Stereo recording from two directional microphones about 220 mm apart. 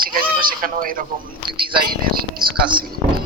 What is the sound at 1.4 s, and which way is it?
Speech, 20° right (ahead or behind).